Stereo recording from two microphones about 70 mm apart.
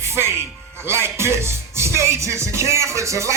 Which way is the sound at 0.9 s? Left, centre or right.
Right.